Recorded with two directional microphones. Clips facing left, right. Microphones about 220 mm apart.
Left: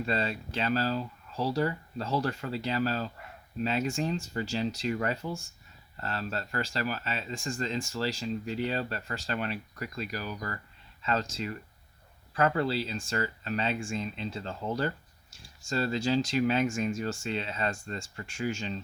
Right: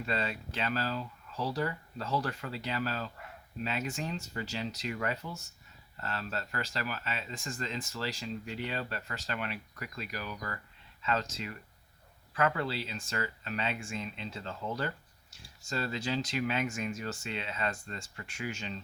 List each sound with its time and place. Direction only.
0.0 s speech: 35° left (ahead or behind)